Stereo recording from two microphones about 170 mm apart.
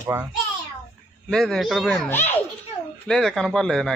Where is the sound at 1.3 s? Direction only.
5° left (ahead or behind).